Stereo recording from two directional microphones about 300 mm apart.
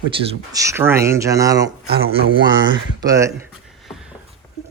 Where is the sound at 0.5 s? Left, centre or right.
Centre.